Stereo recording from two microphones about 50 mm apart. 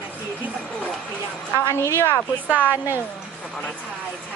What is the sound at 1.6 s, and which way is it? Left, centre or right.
Speech, left.